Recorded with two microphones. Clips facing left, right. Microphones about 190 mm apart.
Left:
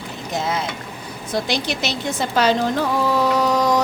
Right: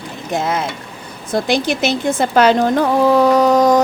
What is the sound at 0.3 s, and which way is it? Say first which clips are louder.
Speech: right 4 dB; 55° right (ahead or behind).